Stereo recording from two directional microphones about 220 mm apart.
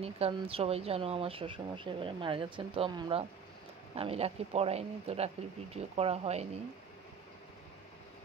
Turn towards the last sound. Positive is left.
turn(degrees=-30)  # may be behind; listen again after turning